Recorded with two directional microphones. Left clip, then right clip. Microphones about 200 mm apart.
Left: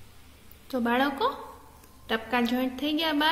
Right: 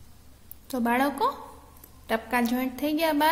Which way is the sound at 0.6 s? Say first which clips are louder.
Right 1 dB; 20° right (ahead or behind).